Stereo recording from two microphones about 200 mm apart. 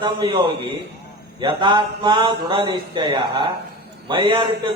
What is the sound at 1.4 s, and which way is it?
A man's voice, 25° right (ahead or behind).